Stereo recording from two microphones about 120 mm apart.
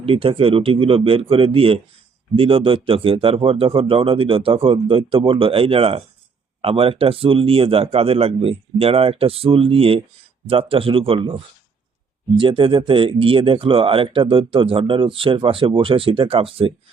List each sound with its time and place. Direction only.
0.0 s speech: 50° right (ahead or behind)
12.4 s speech: 45° right (ahead or behind)